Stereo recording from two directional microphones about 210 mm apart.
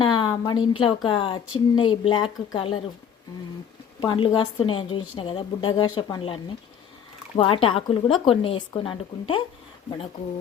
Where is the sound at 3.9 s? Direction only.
25° left (ahead or behind).